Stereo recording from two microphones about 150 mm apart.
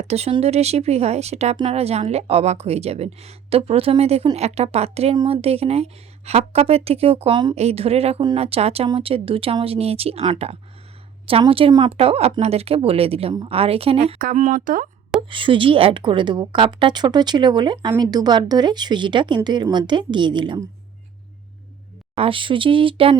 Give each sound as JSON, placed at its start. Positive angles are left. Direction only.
{"t": 0.0, "sound": "a woman's voice", "side_deg": -45}
{"t": 14.3, "sound": "speech", "side_deg": -60}
{"t": 15.3, "sound": "a woman's voice", "side_deg": -35}
{"t": 22.1, "sound": "a woman's voice", "side_deg": -40}